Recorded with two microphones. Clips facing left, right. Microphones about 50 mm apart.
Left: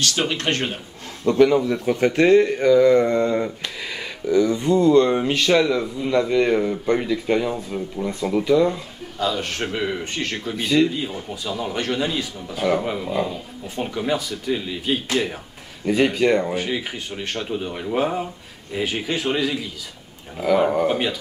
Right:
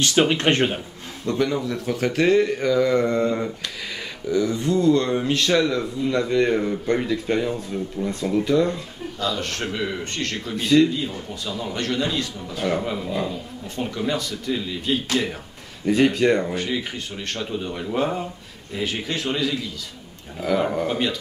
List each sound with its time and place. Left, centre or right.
0.0 s speech: centre
1.4 s speech: left; by 3.3 s centre
4.5 s speech: left; by 7.5 s centre
7.5 s speech: centre